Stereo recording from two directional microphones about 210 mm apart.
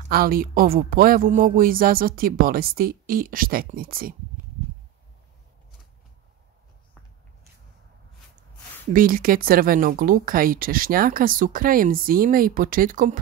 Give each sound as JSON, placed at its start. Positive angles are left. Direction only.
{"t": 0.1, "sound": "speech", "side_deg": -45}
{"t": 8.9, "sound": "speech", "side_deg": -40}